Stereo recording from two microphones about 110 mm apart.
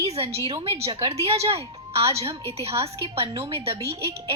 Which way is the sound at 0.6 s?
55° right (ahead or behind).